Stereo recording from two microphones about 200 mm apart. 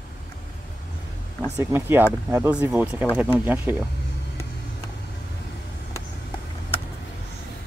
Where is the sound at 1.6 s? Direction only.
10° right (ahead or behind).